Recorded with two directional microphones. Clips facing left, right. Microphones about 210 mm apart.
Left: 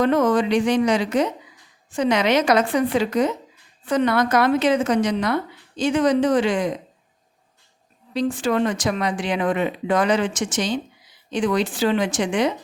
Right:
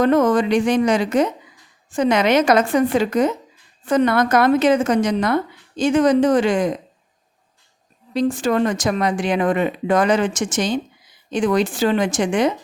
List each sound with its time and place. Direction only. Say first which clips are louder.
0.0 s a woman's voice: right 2 dB; 45° right (ahead or behind)
8.1 s a woman's voice: right 3 dB; 45° right (ahead or behind)